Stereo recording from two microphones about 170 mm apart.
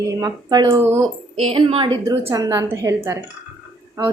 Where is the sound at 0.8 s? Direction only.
15° right (ahead or behind).